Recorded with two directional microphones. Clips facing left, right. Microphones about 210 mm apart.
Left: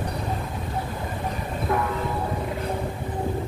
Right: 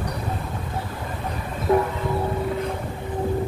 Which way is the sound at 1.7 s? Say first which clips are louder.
Right 7 dB; 30° right (ahead or behind).